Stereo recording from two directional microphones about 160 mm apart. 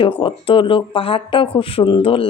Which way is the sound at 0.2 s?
35° left (ahead or behind).